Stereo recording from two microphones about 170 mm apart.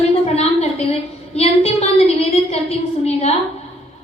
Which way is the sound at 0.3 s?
40° left (ahead or behind).